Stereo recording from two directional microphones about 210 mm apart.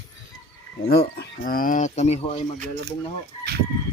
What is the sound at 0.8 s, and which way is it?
Speech, 50° left (ahead or behind).